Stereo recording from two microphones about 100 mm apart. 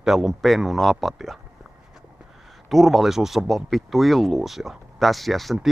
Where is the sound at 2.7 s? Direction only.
Centre (ahead or behind).